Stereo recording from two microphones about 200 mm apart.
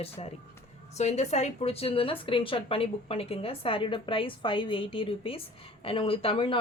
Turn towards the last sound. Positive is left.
turn(degrees=25)  # may be behind; listen again after turning